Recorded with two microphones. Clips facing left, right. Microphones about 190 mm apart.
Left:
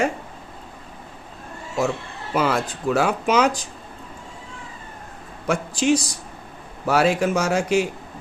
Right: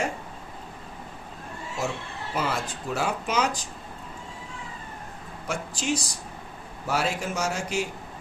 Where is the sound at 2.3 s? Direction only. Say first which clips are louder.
Left 7 dB; 80° left.